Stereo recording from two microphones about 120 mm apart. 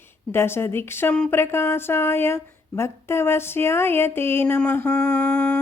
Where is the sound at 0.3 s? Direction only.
20° left (ahead or behind).